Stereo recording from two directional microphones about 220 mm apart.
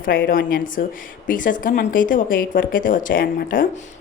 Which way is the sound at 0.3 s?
40° left (ahead or behind).